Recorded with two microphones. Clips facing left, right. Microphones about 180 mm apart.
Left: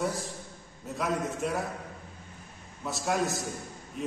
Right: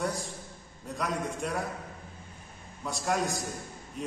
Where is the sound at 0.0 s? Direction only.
Centre (ahead or behind).